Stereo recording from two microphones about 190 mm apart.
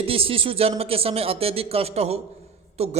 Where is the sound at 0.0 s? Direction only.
30° right (ahead or behind).